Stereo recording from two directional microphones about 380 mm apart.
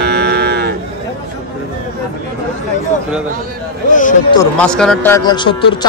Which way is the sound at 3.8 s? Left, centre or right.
Centre.